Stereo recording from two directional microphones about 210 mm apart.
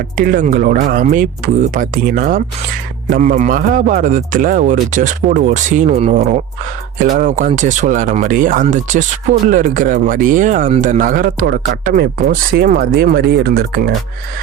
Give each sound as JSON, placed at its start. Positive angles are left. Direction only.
{"t": 0.2, "sound": "a man's voice", "side_deg": -40}